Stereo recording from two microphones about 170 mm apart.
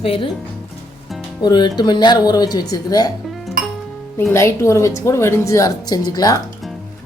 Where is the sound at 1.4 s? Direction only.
25° left (ahead or behind).